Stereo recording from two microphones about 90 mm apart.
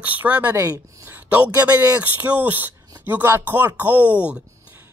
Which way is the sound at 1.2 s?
15° right (ahead or behind).